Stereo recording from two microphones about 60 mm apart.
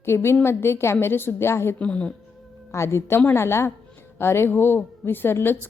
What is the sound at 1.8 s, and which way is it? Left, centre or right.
Speech, centre.